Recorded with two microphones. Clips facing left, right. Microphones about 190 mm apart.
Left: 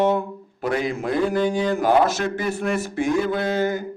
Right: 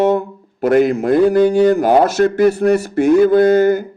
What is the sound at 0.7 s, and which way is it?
Speech, 65° right (ahead or behind).